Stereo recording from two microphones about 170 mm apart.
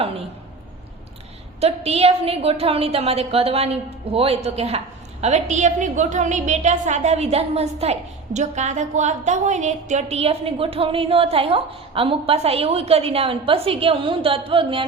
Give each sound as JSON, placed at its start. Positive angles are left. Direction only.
{"t": 0.0, "sound": "a woman's voice", "side_deg": -35}
{"t": 1.6, "sound": "a woman's voice", "side_deg": -35}